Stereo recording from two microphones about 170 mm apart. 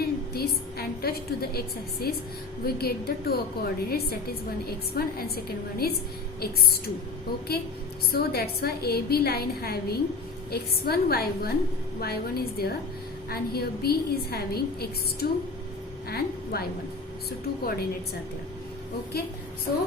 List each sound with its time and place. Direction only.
0.0 s a sound: 65° left (ahead or behind)
2.6 s a woman's voice: 65° left (ahead or behind)
8.1 s a woman's voice: 65° left (ahead or behind)